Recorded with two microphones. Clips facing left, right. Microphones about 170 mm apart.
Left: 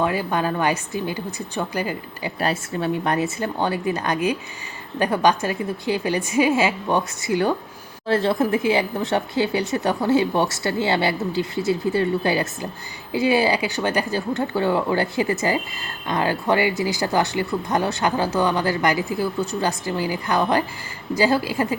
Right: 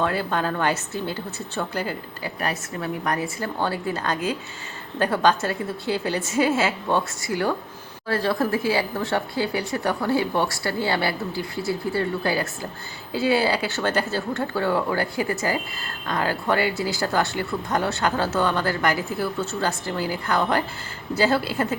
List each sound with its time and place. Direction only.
0.0 s speech: 10° left (ahead or behind)
2.4 s speech: 30° left (ahead or behind); by 21.8 s 10° left (ahead or behind)